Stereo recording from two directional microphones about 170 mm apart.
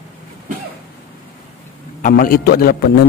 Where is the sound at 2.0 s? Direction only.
55° left (ahead or behind).